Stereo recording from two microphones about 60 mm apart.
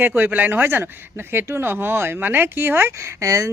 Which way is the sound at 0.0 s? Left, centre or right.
Right.